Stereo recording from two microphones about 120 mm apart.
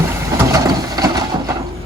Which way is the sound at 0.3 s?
30° right (ahead or behind).